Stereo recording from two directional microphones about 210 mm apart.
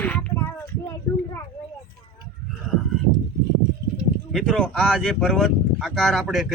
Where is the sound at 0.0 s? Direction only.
5° left (ahead or behind).